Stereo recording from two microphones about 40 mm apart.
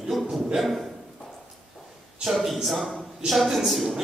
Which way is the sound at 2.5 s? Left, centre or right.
Centre.